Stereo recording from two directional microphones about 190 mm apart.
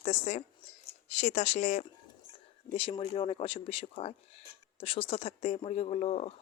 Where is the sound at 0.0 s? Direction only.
35° left (ahead or behind).